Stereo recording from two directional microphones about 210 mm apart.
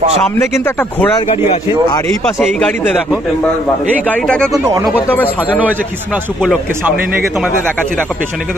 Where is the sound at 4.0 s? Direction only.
5° left (ahead or behind).